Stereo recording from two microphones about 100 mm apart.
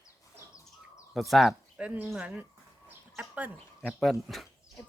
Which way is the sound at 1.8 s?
15° right (ahead or behind).